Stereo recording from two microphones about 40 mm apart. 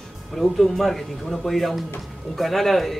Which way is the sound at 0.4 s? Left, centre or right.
Centre.